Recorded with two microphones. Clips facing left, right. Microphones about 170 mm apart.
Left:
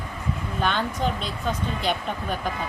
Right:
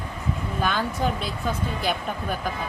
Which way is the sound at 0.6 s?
5° right (ahead or behind).